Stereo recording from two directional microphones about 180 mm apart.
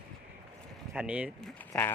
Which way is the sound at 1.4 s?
10° left (ahead or behind).